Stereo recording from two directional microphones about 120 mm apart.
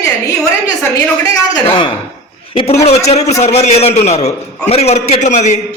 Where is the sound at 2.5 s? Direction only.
60° left (ahead or behind).